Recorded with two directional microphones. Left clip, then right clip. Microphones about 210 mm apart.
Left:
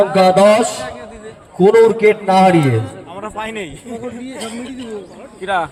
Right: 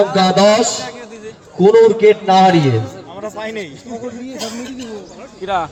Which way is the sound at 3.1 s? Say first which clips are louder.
Even; 50° left (ahead or behind).